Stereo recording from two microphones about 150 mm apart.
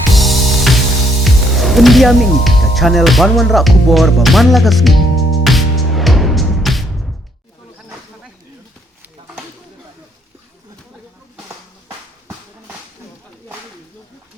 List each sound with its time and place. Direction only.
0.1 s music: centre (ahead or behind)